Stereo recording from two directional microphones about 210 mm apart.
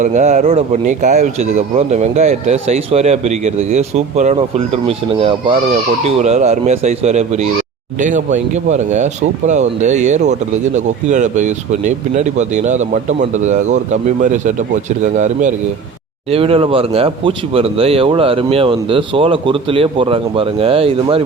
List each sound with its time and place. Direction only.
0.0 s speech: 35° right (ahead or behind)